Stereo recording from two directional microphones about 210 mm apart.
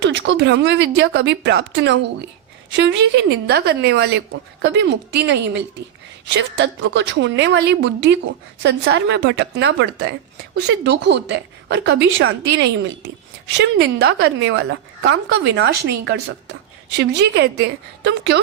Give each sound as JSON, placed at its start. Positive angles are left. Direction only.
{"t": 0.0, "sound": "a woman's voice", "side_deg": -55}
{"t": 13.5, "sound": "a woman's voice", "side_deg": -55}